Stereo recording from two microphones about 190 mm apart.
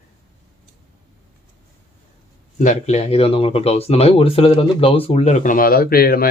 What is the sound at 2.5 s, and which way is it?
Speech, 40° left (ahead or behind).